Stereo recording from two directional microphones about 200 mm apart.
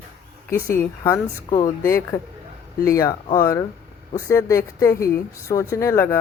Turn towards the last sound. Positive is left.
turn(degrees=15)  # may be behind; listen again after turning